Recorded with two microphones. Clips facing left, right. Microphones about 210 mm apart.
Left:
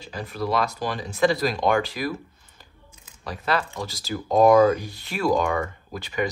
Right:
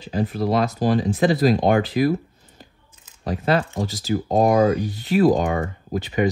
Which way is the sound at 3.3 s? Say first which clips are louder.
Right 5 dB; 40° right (ahead or behind).